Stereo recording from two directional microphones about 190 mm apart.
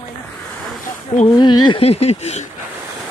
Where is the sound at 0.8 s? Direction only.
35° left (ahead or behind).